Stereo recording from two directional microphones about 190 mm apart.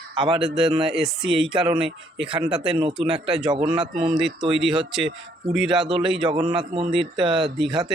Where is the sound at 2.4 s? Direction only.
5° right (ahead or behind).